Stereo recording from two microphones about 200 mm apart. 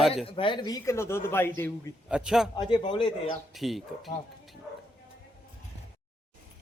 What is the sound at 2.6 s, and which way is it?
Speech, 25° left (ahead or behind).